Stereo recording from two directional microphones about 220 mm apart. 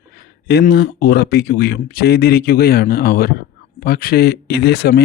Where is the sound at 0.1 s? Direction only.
45° left (ahead or behind).